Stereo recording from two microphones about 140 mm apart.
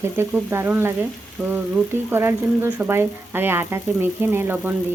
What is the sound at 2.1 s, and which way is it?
Speech, 15° right (ahead or behind).